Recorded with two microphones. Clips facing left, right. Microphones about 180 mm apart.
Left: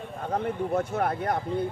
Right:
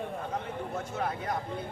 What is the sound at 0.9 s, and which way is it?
Speech, 60° left (ahead or behind).